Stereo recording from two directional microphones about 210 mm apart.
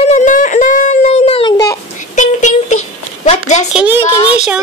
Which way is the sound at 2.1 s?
35° left (ahead or behind).